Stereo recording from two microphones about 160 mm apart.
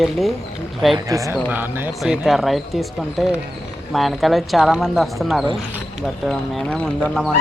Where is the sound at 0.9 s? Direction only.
20° right (ahead or behind).